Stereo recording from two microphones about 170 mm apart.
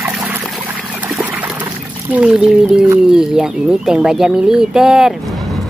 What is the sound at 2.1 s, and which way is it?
Speech, 5° right (ahead or behind).